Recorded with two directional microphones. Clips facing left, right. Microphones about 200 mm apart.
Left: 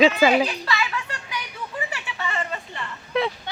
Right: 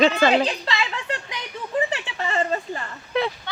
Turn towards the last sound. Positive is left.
turn(degrees=0)  # may be behind; listen again after turning